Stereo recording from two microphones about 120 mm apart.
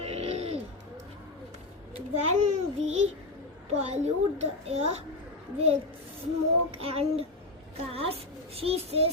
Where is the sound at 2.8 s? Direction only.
65° right (ahead or behind).